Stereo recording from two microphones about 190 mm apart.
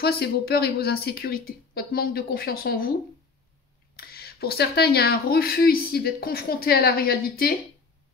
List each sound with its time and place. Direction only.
0.0 s speech: 55° left (ahead or behind)
3.9 s speech: 55° left (ahead or behind)